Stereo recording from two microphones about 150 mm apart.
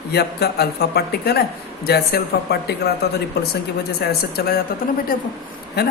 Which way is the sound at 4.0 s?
90° left.